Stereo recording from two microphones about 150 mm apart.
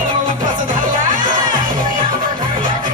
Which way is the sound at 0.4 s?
60° right (ahead or behind).